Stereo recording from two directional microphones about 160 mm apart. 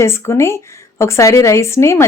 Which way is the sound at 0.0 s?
15° left (ahead or behind).